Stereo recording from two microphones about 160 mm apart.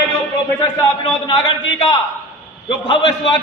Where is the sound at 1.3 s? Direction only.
30° left (ahead or behind).